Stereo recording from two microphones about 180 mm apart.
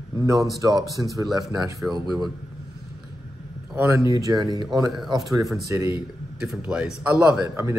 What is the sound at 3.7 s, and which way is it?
Speech, 10° right (ahead or behind).